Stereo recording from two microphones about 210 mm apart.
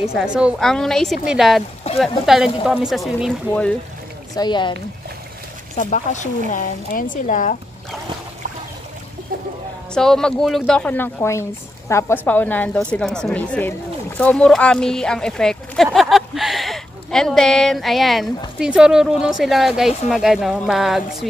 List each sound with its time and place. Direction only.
0.1 s speech: 5° right (ahead or behind)
4.4 s speech: 20° left (ahead or behind)
5.8 s speech: 35° left (ahead or behind)
9.9 s speech: 5° left (ahead or behind)